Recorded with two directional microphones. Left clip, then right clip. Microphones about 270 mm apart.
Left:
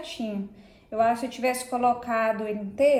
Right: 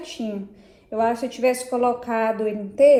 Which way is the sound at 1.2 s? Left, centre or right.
Right.